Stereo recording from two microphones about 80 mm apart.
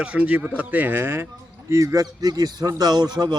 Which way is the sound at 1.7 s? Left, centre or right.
Right.